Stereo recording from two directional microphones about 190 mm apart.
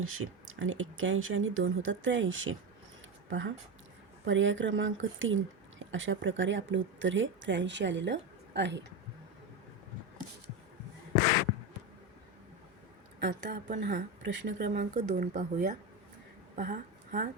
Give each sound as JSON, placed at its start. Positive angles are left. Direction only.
{"t": 0.0, "sound": "speech", "side_deg": -90}
{"t": 13.4, "sound": "speech", "side_deg": -40}
{"t": 13.7, "sound": "speech", "side_deg": -70}
{"t": 14.9, "sound": "speech", "side_deg": -40}
{"t": 16.6, "sound": "a sound", "side_deg": -45}